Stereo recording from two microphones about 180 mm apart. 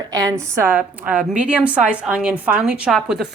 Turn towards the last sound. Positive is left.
turn(degrees=0)  # may be behind; listen again after turning